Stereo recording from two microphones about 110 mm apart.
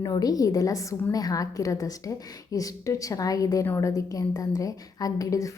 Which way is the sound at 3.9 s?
30° left (ahead or behind).